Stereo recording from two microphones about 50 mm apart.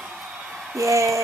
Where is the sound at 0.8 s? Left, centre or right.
Right.